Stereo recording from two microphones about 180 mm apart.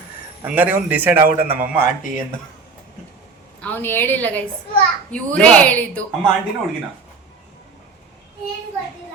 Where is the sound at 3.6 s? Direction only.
10° left (ahead or behind).